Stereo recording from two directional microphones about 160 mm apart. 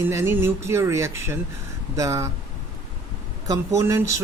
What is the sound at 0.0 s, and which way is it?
Speech, 15° right (ahead or behind).